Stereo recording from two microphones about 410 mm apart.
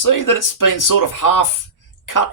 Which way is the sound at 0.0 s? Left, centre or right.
Left.